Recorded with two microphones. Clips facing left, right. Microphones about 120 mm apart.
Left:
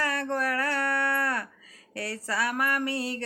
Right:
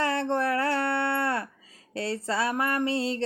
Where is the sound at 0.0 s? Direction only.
25° right (ahead or behind).